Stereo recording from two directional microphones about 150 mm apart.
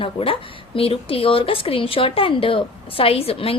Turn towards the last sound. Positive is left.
turn(degrees=40)  # may be behind; listen again after turning